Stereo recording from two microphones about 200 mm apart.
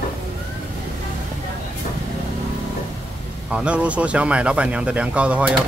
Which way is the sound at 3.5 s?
5° right (ahead or behind).